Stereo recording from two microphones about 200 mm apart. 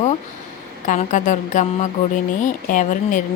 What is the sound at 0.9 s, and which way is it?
Speech, 40° left (ahead or behind).